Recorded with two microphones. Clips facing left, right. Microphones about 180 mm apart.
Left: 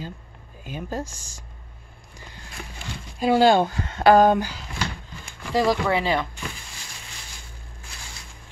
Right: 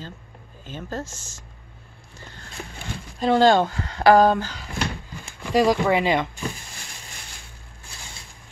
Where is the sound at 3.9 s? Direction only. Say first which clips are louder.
Even; 25° left (ahead or behind).